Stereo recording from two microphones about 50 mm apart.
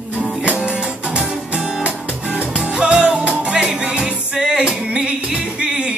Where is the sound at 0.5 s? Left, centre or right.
Right.